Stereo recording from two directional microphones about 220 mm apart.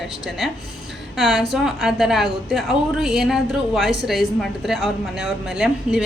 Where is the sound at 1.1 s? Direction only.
Centre (ahead or behind).